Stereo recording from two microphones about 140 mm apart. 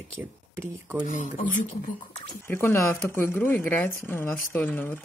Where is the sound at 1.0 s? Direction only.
65° left (ahead or behind).